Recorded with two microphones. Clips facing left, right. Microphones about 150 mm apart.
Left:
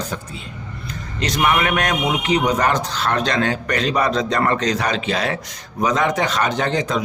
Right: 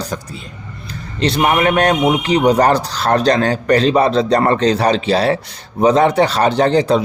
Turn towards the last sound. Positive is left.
turn(degrees=-35)  # may be behind; listen again after turning